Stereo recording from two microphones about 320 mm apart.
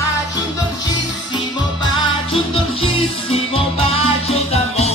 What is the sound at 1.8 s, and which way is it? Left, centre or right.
Music, centre.